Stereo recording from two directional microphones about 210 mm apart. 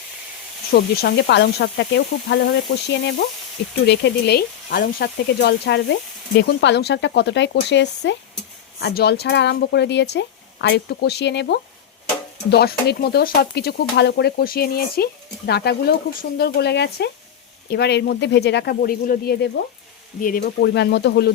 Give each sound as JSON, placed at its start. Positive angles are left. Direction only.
{"t": 0.7, "sound": "speech", "side_deg": 50}